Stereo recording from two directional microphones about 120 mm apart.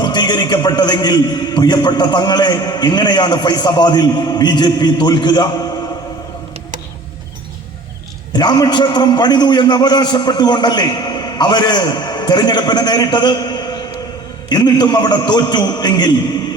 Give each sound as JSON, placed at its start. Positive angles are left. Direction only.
{"t": 0.0, "sound": "a man's voice", "side_deg": 35}
{"t": 8.3, "sound": "a man's voice", "side_deg": 35}